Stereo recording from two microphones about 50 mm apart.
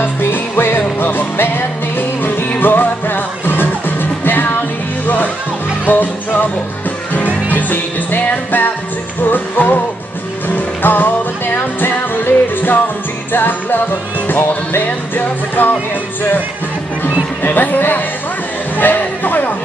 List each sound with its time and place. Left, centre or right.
0.0 s music: left
7.5 s music: left
17.4 s speech: left
18.8 s music: left